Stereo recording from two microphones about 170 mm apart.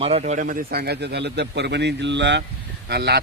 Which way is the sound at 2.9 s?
75° right (ahead or behind).